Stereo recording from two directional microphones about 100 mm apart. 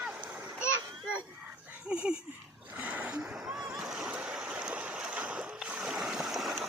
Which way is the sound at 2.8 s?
15° right (ahead or behind).